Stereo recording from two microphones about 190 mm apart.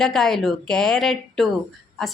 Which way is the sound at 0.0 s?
Centre (ahead or behind).